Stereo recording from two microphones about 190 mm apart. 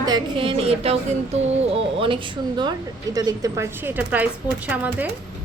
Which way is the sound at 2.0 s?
25° right (ahead or behind).